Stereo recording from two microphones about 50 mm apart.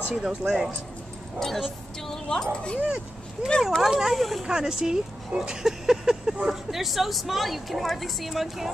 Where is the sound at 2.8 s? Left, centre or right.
Centre.